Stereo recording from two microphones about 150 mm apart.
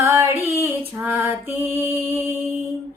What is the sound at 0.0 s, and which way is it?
Female singing, 20° right (ahead or behind).